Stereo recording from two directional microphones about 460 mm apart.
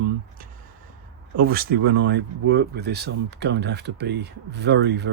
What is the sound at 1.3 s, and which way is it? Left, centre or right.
Speech, centre.